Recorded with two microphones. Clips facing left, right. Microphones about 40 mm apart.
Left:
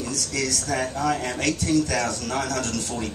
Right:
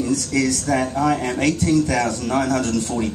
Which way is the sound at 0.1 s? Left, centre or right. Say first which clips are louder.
Right 6 dB; centre.